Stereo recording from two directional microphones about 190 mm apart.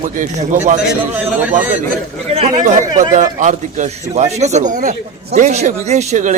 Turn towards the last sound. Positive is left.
turn(degrees=-40)  # may be behind; listen again after turning